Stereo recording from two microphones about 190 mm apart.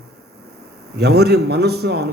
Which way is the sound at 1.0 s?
60° right (ahead or behind).